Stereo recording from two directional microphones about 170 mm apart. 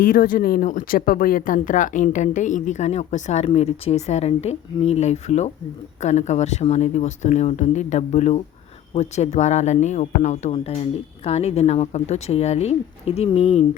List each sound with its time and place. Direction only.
0.0 s speech: 60° left (ahead or behind); by 13.7 s 35° left (ahead or behind)